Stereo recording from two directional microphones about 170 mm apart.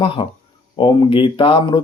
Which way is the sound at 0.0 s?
35° left (ahead or behind).